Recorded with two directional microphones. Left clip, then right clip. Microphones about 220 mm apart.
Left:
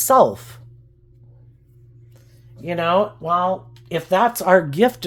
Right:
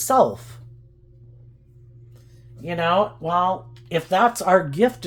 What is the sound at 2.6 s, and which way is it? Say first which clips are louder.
Speech: left 2 dB; 35° left (ahead or behind).